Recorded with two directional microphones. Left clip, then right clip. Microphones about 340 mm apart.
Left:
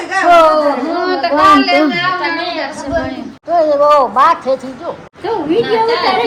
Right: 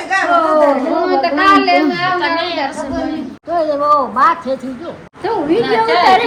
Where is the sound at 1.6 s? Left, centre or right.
Centre.